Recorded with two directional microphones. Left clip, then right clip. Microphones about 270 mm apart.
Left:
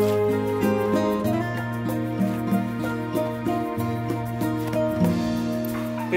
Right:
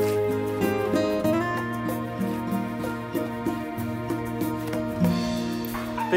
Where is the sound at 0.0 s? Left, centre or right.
Centre.